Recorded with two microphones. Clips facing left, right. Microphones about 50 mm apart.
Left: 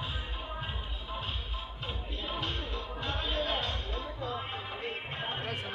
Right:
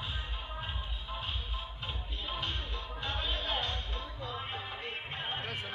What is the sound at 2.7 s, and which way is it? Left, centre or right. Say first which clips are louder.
Music: left 2 dB; left.